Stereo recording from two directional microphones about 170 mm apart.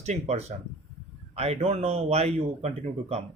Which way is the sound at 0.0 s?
40° right (ahead or behind).